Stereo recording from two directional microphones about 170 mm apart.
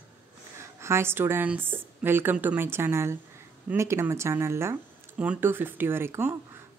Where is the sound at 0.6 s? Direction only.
15° right (ahead or behind).